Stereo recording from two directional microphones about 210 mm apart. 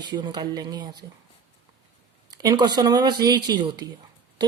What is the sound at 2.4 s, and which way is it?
A woman's voice, 20° right (ahead or behind).